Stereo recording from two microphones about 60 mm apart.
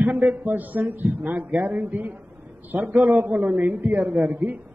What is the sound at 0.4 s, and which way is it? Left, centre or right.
A man's voice, right.